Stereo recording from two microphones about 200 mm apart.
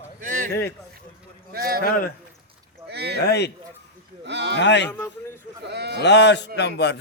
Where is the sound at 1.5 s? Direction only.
50° right (ahead or behind).